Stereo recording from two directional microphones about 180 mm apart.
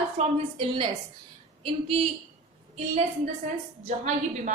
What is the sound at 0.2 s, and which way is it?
Speech, 30° right (ahead or behind).